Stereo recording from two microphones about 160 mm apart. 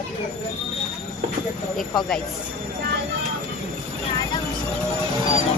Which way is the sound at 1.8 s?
Centre (ahead or behind).